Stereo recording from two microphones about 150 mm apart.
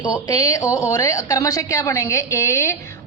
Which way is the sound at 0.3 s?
20° left (ahead or behind).